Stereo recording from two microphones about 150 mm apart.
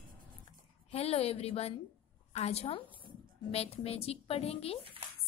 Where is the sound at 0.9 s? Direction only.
40° left (ahead or behind).